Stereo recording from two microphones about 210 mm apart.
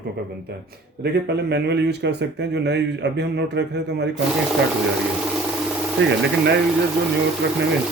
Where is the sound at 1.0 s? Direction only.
50° right (ahead or behind).